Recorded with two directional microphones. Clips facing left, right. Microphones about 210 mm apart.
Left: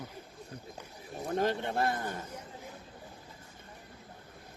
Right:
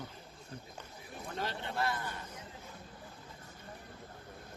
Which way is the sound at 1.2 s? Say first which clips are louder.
Left 9 dB; 50° left (ahead or behind).